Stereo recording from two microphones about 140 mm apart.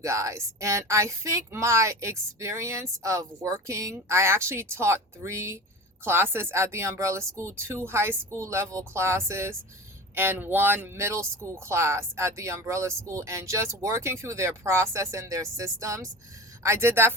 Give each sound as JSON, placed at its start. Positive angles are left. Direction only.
{"t": 0.0, "sound": "speech", "side_deg": -20}